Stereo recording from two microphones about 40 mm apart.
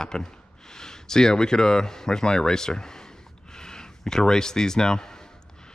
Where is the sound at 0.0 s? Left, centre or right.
Centre.